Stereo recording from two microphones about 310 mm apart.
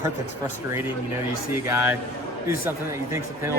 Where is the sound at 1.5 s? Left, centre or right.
Centre.